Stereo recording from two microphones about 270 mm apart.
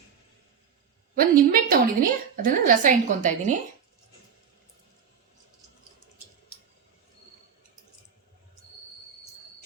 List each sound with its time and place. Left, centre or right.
1.1 s a woman's voice: right